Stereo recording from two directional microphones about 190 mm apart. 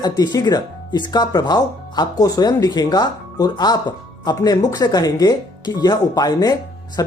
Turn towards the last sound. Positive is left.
turn(degrees=20)  # may be behind; listen again after turning